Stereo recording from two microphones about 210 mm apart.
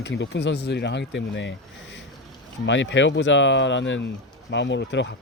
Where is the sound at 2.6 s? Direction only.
60° left (ahead or behind).